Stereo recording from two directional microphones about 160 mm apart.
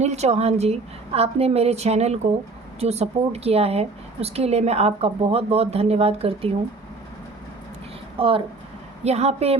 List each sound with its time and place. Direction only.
0.0 s a woman's voice: 45° right (ahead or behind)
8.2 s a woman's voice: 35° right (ahead or behind)